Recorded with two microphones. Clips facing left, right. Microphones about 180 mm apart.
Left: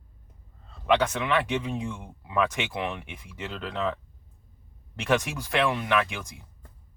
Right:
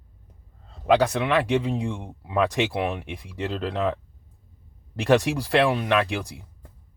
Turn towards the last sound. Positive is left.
turn(degrees=-35)  # may be behind; listen again after turning